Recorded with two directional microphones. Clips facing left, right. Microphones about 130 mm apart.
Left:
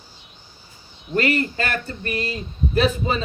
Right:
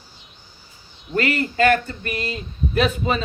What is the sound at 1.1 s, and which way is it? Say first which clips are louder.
Speech: left 1 dB; 35° left (ahead or behind).